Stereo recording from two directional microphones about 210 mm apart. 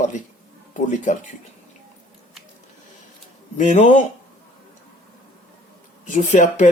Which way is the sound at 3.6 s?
35° left (ahead or behind).